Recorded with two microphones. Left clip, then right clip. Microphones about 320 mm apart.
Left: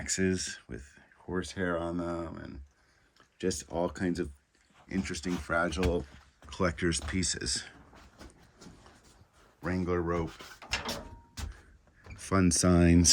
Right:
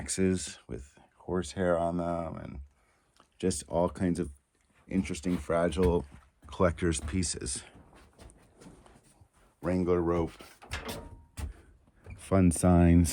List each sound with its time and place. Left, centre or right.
0.0 s speech: centre
9.6 s speech: centre
12.2 s speech: centre